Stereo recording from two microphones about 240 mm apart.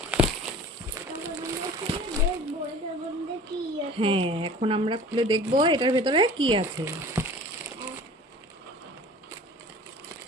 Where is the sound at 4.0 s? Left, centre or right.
Right.